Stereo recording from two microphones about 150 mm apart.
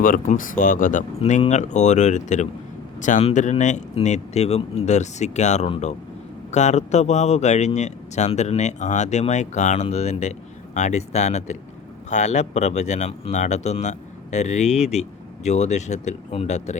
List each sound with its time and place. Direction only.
0.0 s speech: 65° left (ahead or behind)
1.2 s speech: 45° left (ahead or behind)